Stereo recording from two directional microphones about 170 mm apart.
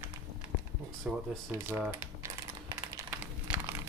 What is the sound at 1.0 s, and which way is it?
Speech, 5° right (ahead or behind).